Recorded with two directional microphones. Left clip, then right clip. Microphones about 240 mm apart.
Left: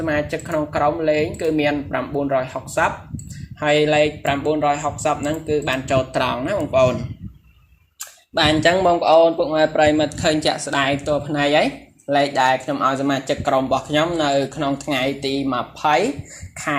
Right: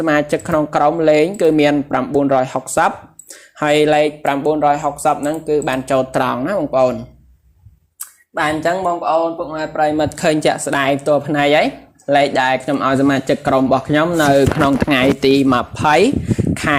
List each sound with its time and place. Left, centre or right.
0.0 s speech: right; by 6.9 s centre
8.6 s speech: left
10.0 s speech: right